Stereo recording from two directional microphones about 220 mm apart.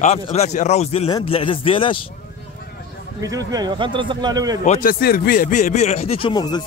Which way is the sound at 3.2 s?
15° right (ahead or behind).